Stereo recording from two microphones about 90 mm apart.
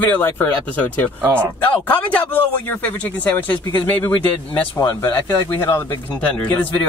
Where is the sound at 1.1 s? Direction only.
20° right (ahead or behind).